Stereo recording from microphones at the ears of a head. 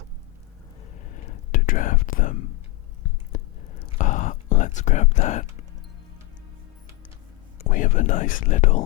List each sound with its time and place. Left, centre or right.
1.1 s whispering: left
7.6 s speech: left